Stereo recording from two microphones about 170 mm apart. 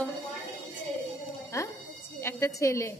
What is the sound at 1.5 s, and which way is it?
A woman's voice, 20° left (ahead or behind).